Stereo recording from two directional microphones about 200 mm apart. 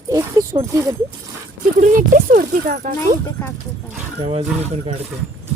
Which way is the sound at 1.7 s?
40° right (ahead or behind).